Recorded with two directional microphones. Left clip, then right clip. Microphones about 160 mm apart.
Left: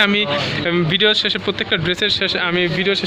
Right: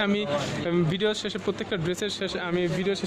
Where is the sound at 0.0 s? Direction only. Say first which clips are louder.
Left 10 dB; 20° right (ahead or behind).